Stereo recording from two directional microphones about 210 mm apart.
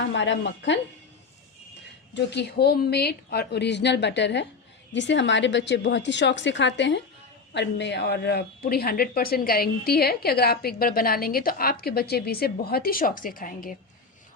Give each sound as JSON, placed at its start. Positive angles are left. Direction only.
{"t": 0.0, "sound": "a woman's voice", "side_deg": 55}
{"t": 2.1, "sound": "a woman's voice", "side_deg": 55}